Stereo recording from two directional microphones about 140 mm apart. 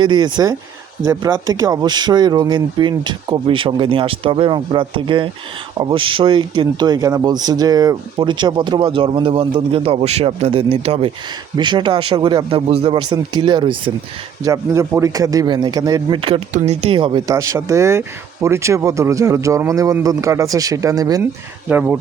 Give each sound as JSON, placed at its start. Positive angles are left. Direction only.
{"t": 0.0, "sound": "speech", "side_deg": -30}
{"t": 11.5, "sound": "speech", "side_deg": -35}
{"t": 13.0, "sound": "speech", "side_deg": -30}
{"t": 14.4, "sound": "speech", "side_deg": -20}
{"t": 21.7, "sound": "speech", "side_deg": -10}